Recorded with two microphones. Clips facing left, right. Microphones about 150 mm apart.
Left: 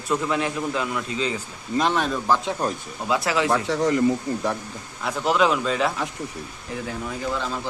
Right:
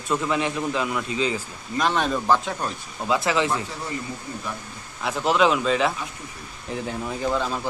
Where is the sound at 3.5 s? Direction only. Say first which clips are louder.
Left 8 dB; 85° left.